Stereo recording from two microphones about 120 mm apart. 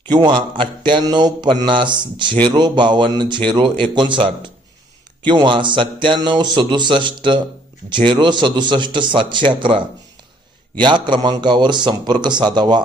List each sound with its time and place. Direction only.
0.1 s speech: 40° right (ahead or behind)